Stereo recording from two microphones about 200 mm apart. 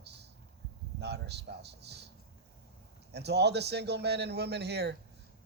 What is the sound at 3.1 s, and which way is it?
Speech, 55° right (ahead or behind).